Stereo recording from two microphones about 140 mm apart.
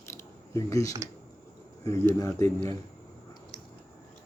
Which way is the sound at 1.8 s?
20° left (ahead or behind).